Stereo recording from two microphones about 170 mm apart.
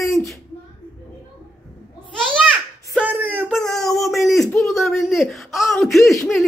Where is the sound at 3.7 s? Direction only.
Centre (ahead or behind).